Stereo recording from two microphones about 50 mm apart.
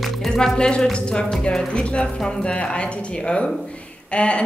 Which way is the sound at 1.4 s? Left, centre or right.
Centre.